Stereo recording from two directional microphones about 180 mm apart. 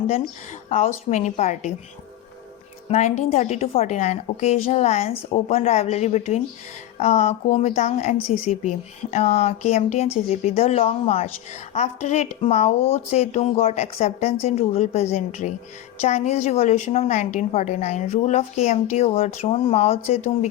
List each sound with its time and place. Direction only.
0.7 s a woman's voice: 40° left (ahead or behind)
2.9 s a woman's voice: 40° left (ahead or behind)